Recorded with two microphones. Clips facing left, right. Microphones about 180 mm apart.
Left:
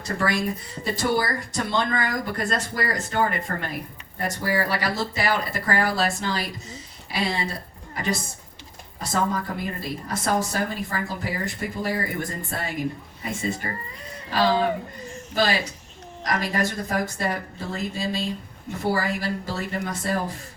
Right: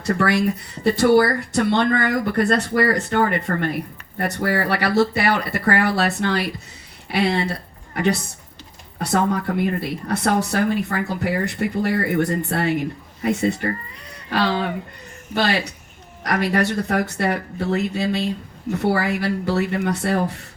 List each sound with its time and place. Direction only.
0.0 s a woman's voice: 65° right (ahead or behind)